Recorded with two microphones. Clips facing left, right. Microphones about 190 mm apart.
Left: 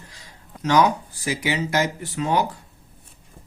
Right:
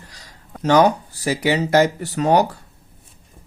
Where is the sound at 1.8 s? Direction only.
70° right (ahead or behind).